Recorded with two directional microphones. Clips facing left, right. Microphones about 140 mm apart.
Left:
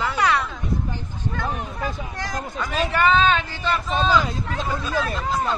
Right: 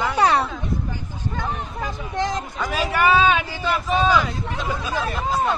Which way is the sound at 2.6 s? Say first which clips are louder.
Even; 5° right (ahead or behind).